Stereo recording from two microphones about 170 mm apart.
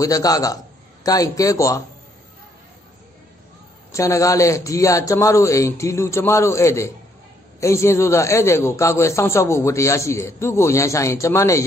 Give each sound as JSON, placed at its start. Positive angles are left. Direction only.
{"t": 0.0, "sound": "a man's voice", "side_deg": 20}
{"t": 3.9, "sound": "a man's voice", "side_deg": 20}